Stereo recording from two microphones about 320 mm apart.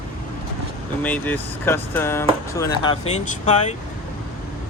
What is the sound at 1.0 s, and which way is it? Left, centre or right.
Speech, centre.